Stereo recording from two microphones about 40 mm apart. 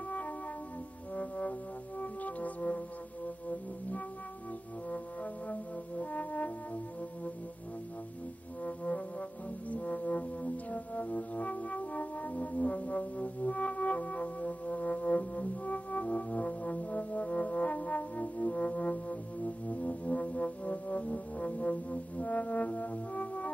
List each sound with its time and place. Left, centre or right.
1.1 s music: left
4.8 s music: left
8.6 s music: left